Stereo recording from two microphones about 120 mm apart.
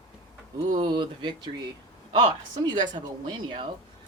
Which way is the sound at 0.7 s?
40° right (ahead or behind).